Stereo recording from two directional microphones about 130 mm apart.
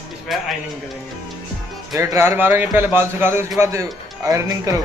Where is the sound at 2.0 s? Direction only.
20° right (ahead or behind).